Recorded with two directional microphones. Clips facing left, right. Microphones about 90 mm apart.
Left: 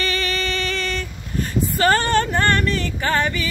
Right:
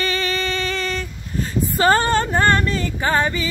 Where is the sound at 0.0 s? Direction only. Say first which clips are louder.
Right 1 dB; 20° right (ahead or behind).